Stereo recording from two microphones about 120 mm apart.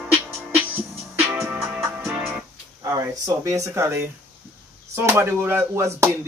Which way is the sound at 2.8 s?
30° right (ahead or behind).